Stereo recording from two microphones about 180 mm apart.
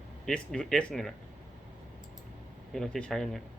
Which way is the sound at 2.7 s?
Centre (ahead or behind).